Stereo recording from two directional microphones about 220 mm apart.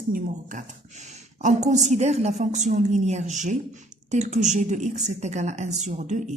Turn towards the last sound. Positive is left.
turn(degrees=-35)  # may be behind; listen again after turning